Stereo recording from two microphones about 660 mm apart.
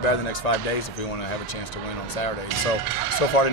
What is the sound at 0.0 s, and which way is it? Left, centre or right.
Speech, left.